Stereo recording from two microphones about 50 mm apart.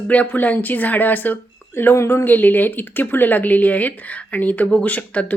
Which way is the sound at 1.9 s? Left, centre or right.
Left.